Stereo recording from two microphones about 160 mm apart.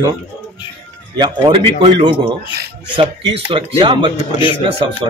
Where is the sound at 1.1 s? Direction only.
25° right (ahead or behind).